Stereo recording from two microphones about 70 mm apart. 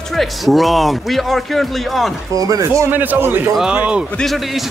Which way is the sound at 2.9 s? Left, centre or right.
Right.